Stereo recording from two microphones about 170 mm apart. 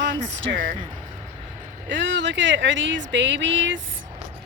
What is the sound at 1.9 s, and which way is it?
Speech, 90° right.